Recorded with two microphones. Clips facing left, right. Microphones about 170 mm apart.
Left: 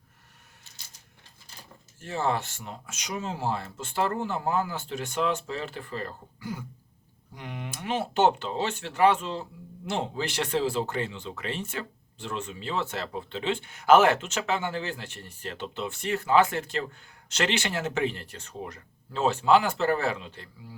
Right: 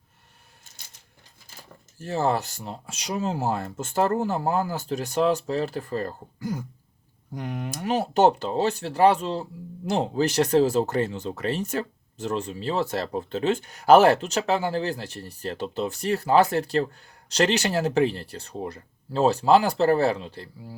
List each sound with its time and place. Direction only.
2.0 s speech: 35° right (ahead or behind)